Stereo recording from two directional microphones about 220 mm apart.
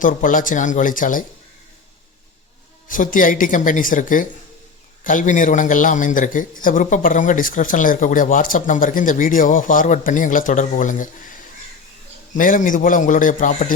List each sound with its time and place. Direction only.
0.0 s speech: 35° left (ahead or behind)
2.9 s speech: 35° left (ahead or behind)